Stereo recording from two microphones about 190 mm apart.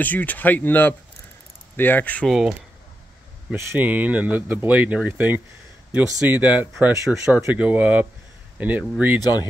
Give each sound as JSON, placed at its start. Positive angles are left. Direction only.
{"t": 0.0, "sound": "speech", "side_deg": 10}
{"t": 3.5, "sound": "speech", "side_deg": -10}
{"t": 9.2, "sound": "speech", "side_deg": 20}